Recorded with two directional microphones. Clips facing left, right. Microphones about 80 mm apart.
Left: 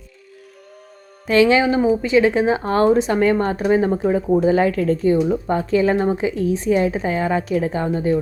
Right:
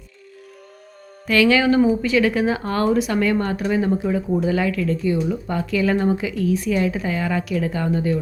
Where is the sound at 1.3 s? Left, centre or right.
Left.